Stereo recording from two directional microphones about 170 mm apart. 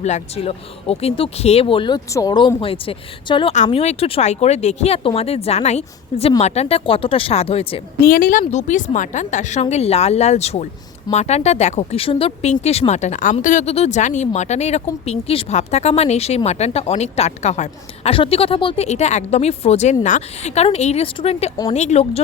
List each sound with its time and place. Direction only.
0.0 s speech: 40° left (ahead or behind)
3.5 s speech: 40° left (ahead or behind)
8.0 s a woman's voice: 55° left (ahead or behind); by 22.2 s 40° left (ahead or behind)